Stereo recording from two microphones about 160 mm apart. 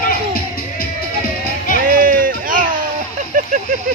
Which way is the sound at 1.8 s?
60° right (ahead or behind).